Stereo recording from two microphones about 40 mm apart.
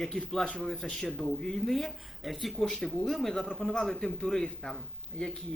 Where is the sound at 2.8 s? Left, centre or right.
Left.